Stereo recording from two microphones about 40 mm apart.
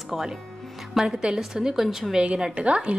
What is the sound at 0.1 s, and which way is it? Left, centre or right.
Speech, centre.